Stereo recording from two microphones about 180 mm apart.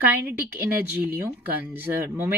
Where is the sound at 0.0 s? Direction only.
10° right (ahead or behind).